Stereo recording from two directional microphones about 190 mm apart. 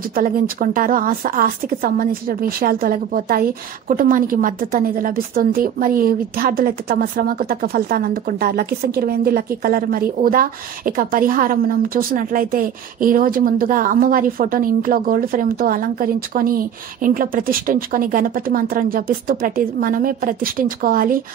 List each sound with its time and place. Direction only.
0.1 s a woman's voice: 50° right (ahead or behind)